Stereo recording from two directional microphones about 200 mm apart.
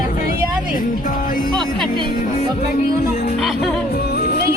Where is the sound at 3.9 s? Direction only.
50° left (ahead or behind).